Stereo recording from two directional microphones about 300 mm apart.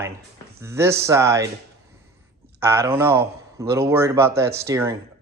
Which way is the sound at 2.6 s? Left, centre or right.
Centre.